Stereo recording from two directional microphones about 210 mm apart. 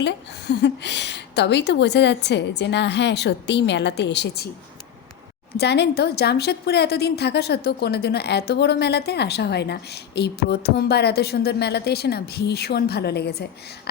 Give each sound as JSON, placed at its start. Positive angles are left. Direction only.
{"t": 0.0, "sound": "a woman's voice", "side_deg": 55}
{"t": 5.5, "sound": "a woman's voice", "side_deg": 55}